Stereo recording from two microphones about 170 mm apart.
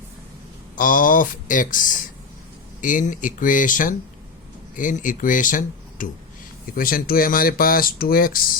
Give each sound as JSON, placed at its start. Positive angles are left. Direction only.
{"t": 0.8, "sound": "speech", "side_deg": 50}